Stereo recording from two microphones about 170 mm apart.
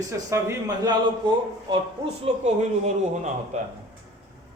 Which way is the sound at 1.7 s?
35° right (ahead or behind).